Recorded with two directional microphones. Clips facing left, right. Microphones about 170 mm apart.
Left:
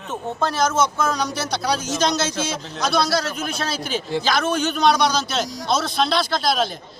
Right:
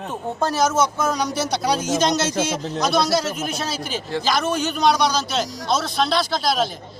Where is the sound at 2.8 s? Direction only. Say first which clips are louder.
Right 1 dB; 20° right (ahead or behind).